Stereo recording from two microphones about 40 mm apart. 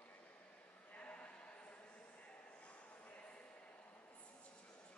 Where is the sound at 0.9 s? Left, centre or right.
Left.